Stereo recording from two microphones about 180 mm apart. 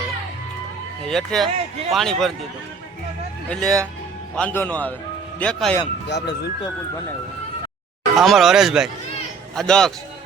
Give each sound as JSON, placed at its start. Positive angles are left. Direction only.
{"t": 1.0, "sound": "speech", "side_deg": 0}
{"t": 3.5, "sound": "a man's voice", "side_deg": 0}
{"t": 6.1, "sound": "speech", "side_deg": 70}
{"t": 8.1, "sound": "speech", "side_deg": 0}